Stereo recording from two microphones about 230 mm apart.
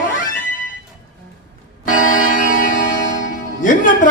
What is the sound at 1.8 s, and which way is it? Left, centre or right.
Music, left.